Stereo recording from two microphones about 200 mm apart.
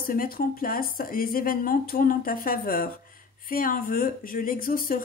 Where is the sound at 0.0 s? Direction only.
45° left (ahead or behind).